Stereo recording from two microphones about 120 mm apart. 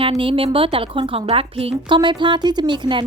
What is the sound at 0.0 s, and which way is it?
A woman's voice, 50° right (ahead or behind).